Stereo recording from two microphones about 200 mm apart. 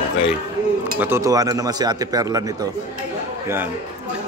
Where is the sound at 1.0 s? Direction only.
10° right (ahead or behind).